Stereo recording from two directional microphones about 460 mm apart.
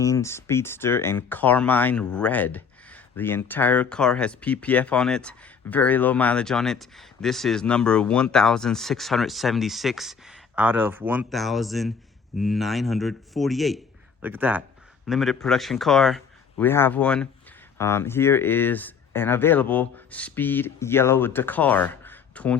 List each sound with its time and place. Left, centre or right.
0.0 s speech: centre